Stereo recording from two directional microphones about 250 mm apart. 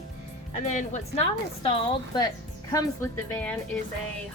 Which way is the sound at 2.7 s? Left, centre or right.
Centre.